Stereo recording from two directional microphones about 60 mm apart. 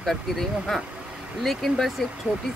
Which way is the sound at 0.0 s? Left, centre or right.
Centre.